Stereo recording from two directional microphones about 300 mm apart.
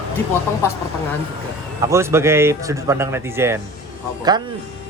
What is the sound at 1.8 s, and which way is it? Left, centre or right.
Speech, centre.